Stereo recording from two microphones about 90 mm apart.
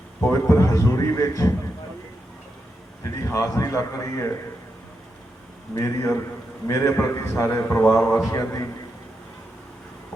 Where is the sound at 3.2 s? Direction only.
35° left (ahead or behind).